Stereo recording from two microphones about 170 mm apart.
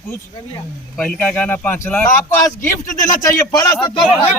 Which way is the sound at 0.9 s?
10° left (ahead or behind).